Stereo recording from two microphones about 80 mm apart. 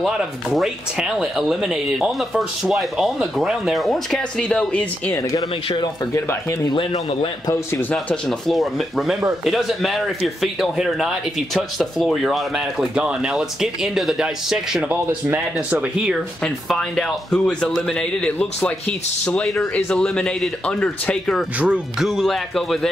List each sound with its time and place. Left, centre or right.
0.0 s speech: centre
4.4 s speech: centre
7.9 s speech: centre
15.7 s speech: centre
16.9 s speech: centre
21.5 s speech: centre
22.0 s speech: centre